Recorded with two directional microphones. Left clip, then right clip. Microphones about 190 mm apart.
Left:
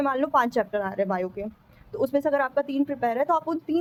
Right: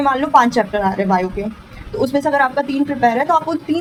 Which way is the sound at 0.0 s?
45° left (ahead or behind).